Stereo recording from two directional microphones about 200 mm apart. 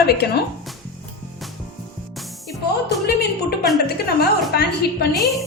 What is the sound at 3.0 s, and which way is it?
Music, 55° left (ahead or behind).